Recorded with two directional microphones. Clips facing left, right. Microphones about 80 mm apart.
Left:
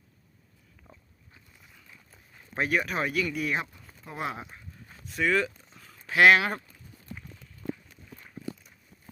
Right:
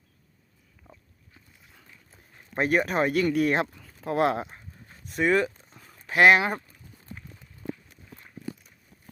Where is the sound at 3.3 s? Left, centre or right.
Right.